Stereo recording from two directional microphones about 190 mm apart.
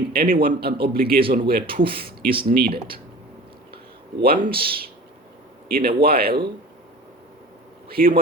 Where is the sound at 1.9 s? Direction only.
50° right (ahead or behind).